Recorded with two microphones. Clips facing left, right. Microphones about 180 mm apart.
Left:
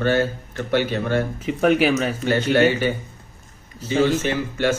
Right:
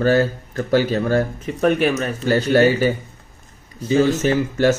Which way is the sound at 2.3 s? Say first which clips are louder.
Right 3 dB; 35° right (ahead or behind).